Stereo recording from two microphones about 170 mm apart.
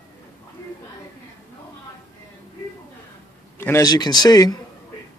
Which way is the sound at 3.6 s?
15° left (ahead or behind).